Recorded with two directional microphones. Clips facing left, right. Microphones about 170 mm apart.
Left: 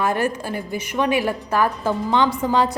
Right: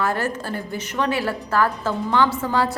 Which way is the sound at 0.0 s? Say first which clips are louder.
Left 2 dB; 15° left (ahead or behind).